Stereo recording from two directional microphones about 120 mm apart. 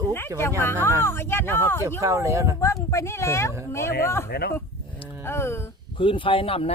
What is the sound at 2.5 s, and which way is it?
Speech, 25° left (ahead or behind).